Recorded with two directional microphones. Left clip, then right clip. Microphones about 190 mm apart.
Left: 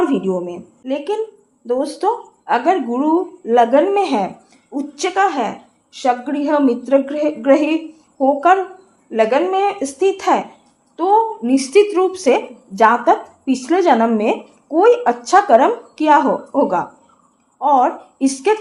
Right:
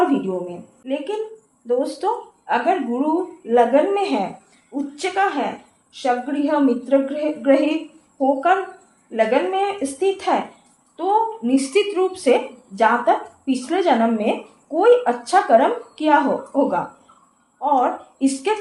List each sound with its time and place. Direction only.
0.1 s a woman's voice: 40° left (ahead or behind)